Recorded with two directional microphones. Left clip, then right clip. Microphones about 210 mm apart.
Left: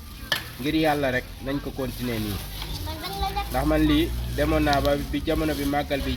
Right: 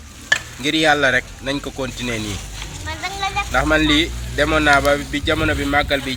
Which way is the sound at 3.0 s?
25° left (ahead or behind).